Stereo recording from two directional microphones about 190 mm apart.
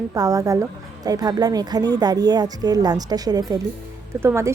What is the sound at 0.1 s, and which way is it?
A woman's voice, 20° right (ahead or behind).